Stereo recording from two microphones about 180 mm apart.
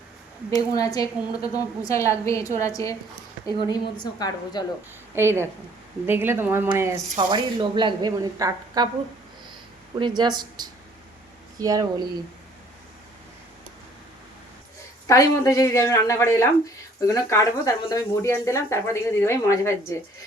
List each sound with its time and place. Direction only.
0.5 s a woman's voice: 20° left (ahead or behind)
5.1 s speech: 15° right (ahead or behind)
9.9 s speech: 25° right (ahead or behind)
15.0 s speech: 20° left (ahead or behind)